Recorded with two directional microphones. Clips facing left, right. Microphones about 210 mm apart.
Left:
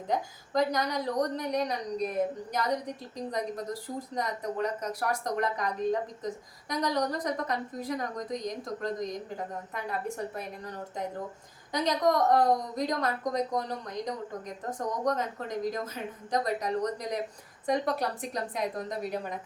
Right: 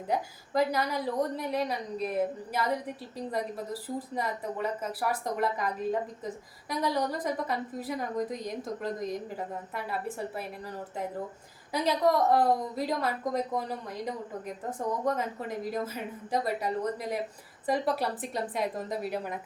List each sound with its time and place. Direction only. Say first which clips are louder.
0.1 s a woman's voice: even; 5° right (ahead or behind)